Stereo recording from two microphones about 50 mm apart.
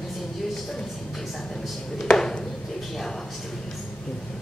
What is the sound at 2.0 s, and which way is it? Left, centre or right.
Speech, centre.